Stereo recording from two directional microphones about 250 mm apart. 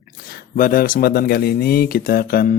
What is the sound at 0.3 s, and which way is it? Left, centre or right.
Speech, left.